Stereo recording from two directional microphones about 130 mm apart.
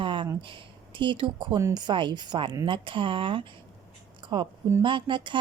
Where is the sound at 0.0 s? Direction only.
40° right (ahead or behind).